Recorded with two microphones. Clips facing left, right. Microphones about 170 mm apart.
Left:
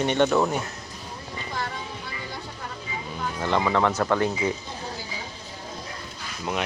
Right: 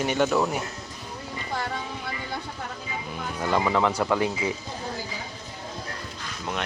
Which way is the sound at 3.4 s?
10° right (ahead or behind).